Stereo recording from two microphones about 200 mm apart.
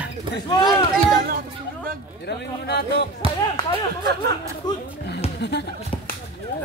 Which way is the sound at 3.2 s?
25° right (ahead or behind).